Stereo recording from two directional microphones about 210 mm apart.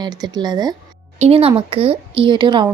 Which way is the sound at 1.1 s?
30° right (ahead or behind).